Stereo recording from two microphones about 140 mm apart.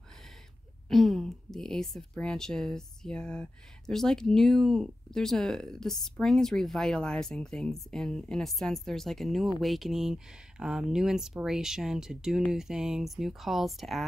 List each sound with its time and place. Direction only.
0.8 s speech: centre (ahead or behind)